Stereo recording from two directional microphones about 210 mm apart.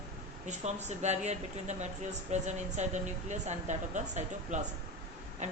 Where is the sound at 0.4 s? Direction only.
35° right (ahead or behind).